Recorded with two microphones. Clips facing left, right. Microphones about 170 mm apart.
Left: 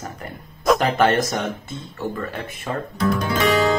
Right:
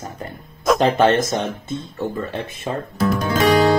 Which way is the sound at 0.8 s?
20° right (ahead or behind).